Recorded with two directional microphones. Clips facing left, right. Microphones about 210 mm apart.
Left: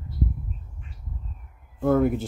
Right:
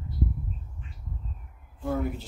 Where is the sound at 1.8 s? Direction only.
60° left (ahead or behind).